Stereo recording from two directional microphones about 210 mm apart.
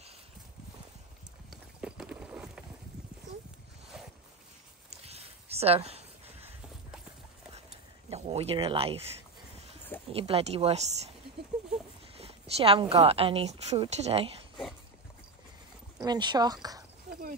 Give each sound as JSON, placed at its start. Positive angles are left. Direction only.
{"t": 1.5, "sound": "clip-clop", "side_deg": -5}
{"t": 5.0, "sound": "a sound", "side_deg": -30}
{"t": 8.1, "sound": "speech", "side_deg": -30}
{"t": 10.1, "sound": "a woman's voice", "side_deg": -30}
{"t": 12.2, "sound": "a woman's voice", "side_deg": -30}
{"t": 16.0, "sound": "a woman's voice", "side_deg": -20}